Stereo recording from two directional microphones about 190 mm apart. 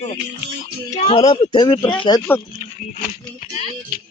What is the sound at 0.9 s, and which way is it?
Speech, 35° left (ahead or behind).